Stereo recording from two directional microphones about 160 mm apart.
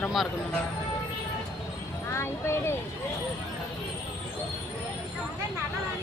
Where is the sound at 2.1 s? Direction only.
15° left (ahead or behind).